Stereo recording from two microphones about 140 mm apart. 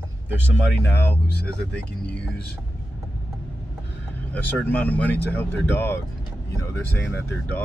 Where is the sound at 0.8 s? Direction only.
15° left (ahead or behind).